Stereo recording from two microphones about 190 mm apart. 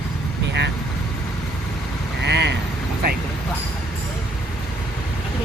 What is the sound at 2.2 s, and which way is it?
Speech, 65° right (ahead or behind).